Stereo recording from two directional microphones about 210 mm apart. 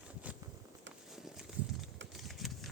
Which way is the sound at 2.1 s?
Centre (ahead or behind).